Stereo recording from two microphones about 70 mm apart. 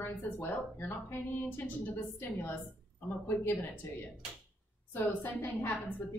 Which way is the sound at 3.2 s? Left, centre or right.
Left.